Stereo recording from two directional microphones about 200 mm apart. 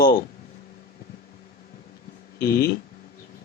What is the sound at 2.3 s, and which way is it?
Speech, 50° left (ahead or behind).